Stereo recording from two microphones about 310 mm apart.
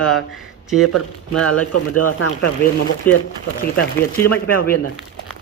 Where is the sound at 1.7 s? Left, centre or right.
Left.